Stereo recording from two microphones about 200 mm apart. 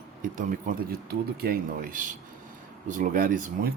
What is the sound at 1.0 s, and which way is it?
Speech, 50° right (ahead or behind).